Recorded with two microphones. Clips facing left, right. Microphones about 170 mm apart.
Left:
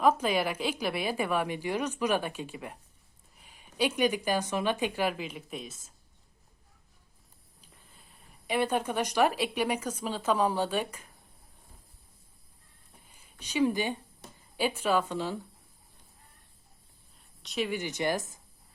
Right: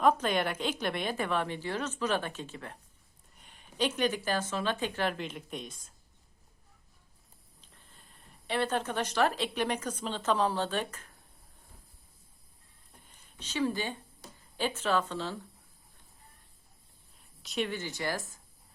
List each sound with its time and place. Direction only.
0.0 s a woman's voice: 5° left (ahead or behind)
8.4 s a woman's voice: 10° left (ahead or behind)
13.1 s a woman's voice: 10° left (ahead or behind)
17.2 s a sound: centre (ahead or behind)
17.7 s speech: 15° left (ahead or behind)